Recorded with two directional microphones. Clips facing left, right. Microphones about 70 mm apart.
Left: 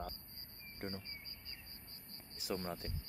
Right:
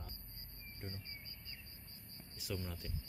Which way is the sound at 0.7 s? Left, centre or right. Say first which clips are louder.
Left 6 dB; left.